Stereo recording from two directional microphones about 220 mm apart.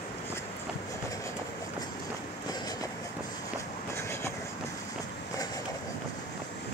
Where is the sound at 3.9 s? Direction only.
15° left (ahead or behind).